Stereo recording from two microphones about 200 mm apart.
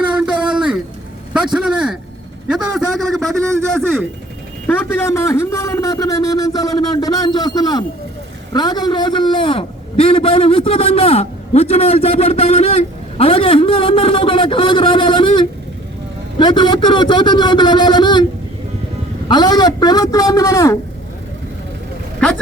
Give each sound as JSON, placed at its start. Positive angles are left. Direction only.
{"t": 0.1, "sound": "a sound", "side_deg": -5}
{"t": 2.5, "sound": "a man's voice", "side_deg": 0}
{"t": 19.3, "sound": "a man's voice", "side_deg": 20}